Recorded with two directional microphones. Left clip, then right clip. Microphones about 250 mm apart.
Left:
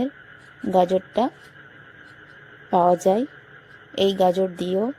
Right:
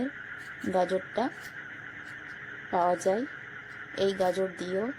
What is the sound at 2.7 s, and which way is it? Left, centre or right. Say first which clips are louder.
Speech: left 8 dB; left.